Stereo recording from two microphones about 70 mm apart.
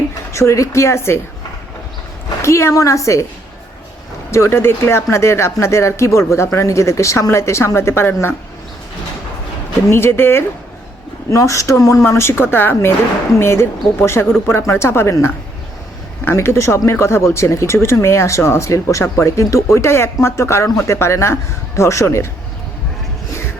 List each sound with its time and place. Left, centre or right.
0.3 s speech: left
2.4 s speech: left
4.3 s speech: left
9.9 s speech: left
11.3 s speech: left
16.2 s speech: left